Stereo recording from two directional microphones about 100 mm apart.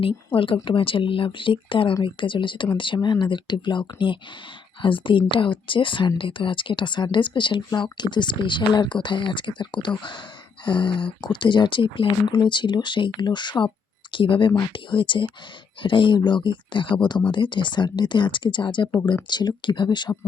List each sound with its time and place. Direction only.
0.3 s speech: 60° left (ahead or behind)